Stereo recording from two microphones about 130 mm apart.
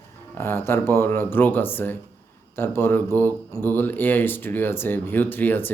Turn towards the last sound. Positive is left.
turn(degrees=15)  # may be behind; listen again after turning